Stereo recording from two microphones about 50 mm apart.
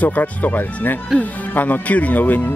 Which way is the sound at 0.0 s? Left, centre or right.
Left.